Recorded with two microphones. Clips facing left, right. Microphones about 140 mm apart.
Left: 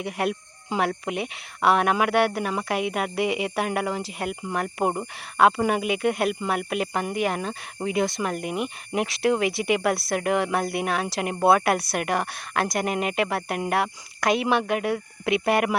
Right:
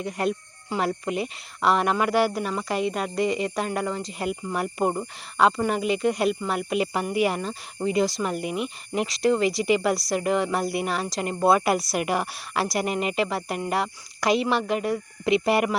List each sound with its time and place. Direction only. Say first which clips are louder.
0.0 s speech: even; 5° left (ahead or behind)